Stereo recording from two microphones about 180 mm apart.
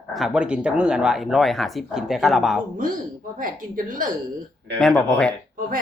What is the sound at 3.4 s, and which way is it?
Speech, 50° right (ahead or behind).